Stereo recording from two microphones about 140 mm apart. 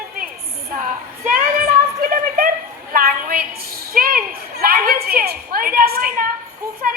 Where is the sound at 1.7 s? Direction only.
90° right.